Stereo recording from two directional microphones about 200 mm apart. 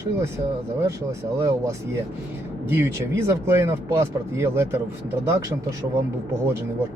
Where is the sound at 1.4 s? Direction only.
15° right (ahead or behind).